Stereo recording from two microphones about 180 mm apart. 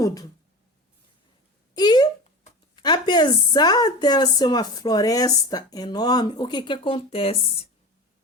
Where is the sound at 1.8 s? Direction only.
25° left (ahead or behind).